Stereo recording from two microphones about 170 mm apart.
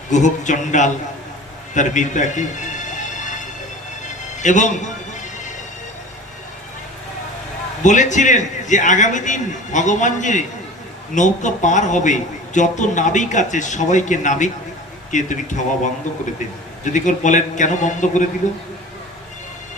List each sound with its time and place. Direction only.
0.1 s a man's voice: 45° left (ahead or behind)
1.7 s music: 45° left (ahead or behind)
7.8 s a man's voice: 45° left (ahead or behind)